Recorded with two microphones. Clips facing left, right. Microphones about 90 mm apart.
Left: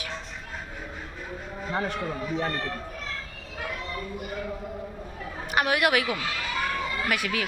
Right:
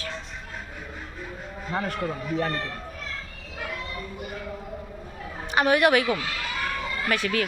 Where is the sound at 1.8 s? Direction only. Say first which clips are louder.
Right 1 dB; 20° left (ahead or behind).